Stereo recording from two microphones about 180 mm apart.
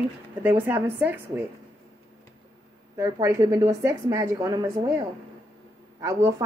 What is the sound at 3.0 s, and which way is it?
A woman's voice, 15° right (ahead or behind).